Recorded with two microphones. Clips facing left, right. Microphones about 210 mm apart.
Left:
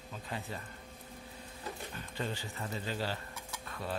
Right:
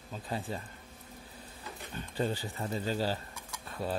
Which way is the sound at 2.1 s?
35° right (ahead or behind).